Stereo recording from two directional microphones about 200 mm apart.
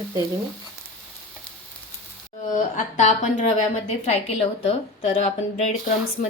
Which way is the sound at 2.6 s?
40° left (ahead or behind).